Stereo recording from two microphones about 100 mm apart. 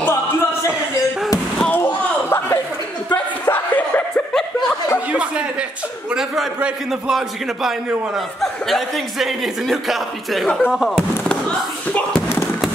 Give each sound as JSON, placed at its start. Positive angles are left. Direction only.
{"t": 2.2, "sound": "chuckle", "side_deg": 20}
{"t": 3.1, "sound": "a sound", "side_deg": 20}
{"t": 6.1, "sound": "speech", "side_deg": -5}
{"t": 11.2, "sound": "slam", "side_deg": 10}